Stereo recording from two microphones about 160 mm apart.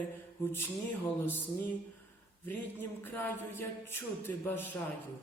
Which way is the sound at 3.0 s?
10° left (ahead or behind).